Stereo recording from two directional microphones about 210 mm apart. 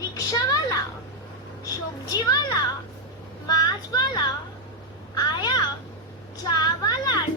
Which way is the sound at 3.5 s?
20° left (ahead or behind).